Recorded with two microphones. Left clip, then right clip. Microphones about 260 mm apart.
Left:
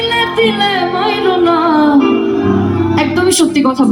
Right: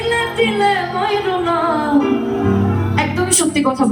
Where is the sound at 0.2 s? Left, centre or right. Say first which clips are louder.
Left 5 dB; left.